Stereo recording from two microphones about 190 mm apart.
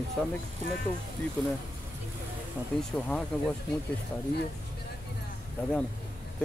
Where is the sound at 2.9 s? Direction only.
5° left (ahead or behind).